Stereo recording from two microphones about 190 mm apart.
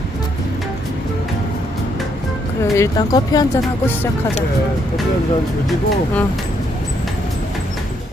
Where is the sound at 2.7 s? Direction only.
15° left (ahead or behind).